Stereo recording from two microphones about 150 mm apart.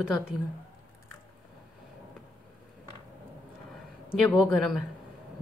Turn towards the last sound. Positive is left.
turn(degrees=0)  # may be behind; listen again after turning